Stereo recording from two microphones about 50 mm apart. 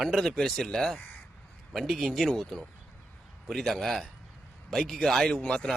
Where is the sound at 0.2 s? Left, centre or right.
Centre.